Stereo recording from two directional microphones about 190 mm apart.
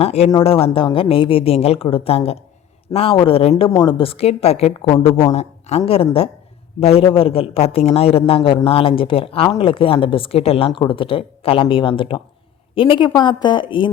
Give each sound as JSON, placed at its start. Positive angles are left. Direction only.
{"t": 0.0, "sound": "a man's voice", "side_deg": 30}
{"t": 3.5, "sound": "a man's voice", "side_deg": 20}